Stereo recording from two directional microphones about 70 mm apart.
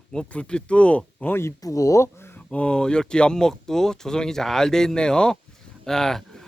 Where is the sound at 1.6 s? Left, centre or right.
Left.